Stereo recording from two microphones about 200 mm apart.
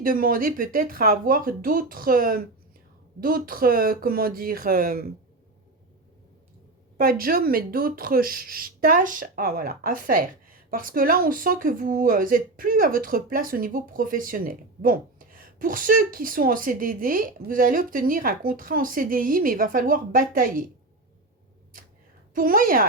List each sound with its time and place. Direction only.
0.0 s speech: 45° right (ahead or behind)
7.0 s speech: 45° right (ahead or behind)
22.4 s speech: 45° right (ahead or behind)